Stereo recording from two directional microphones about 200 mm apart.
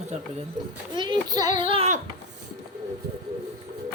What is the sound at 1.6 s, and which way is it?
Child singing, 30° right (ahead or behind).